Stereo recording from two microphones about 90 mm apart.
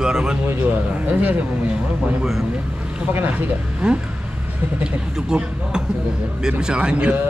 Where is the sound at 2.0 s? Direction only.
5° right (ahead or behind).